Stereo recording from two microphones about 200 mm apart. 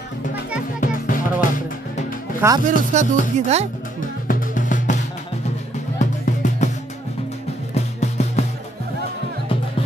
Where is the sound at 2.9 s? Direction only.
35° right (ahead or behind).